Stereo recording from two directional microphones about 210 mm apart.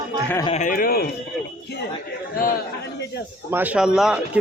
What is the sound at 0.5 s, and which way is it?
Speech, 40° left (ahead or behind).